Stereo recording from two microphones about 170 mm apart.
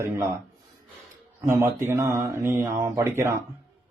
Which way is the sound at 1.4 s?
15° right (ahead or behind).